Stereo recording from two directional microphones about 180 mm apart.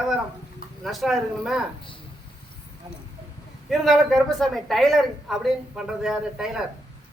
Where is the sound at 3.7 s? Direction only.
Centre (ahead or behind).